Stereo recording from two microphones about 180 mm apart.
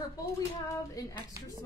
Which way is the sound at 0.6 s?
20° left (ahead or behind).